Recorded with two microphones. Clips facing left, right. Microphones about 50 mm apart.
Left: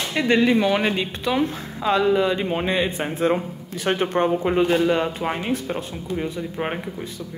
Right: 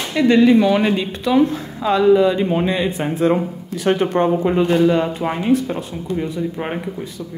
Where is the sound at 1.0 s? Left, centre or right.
Left.